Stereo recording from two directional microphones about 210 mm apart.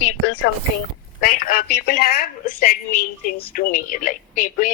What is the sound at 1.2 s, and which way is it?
A woman's voice, 40° left (ahead or behind).